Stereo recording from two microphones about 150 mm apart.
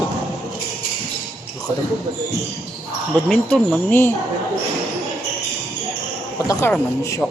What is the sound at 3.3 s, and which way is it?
Speech, 10° left (ahead or behind).